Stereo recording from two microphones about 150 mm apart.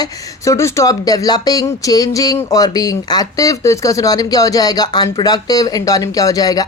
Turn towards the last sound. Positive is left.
turn(degrees=25)  # may be behind; listen again after turning